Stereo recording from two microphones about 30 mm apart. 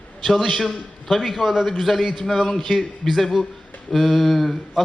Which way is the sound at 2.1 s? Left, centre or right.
Centre.